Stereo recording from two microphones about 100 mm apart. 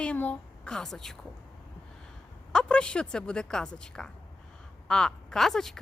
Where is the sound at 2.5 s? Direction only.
10° left (ahead or behind).